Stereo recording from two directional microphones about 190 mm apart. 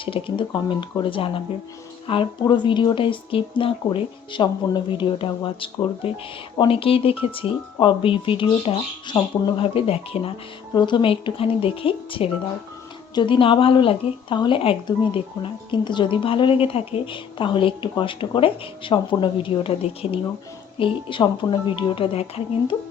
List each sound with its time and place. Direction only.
0.0 s speech: 30° left (ahead or behind)